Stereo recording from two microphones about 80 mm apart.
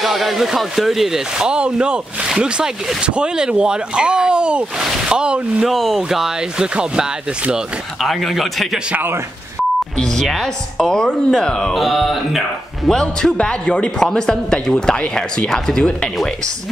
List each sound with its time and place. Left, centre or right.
0.0 s speech: centre
5.7 s speech: centre
8.0 s speech: centre
8.9 s speech: right
9.9 s a woman's voice: centre